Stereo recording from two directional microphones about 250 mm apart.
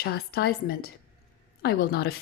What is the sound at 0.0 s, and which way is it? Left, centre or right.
Speech, left.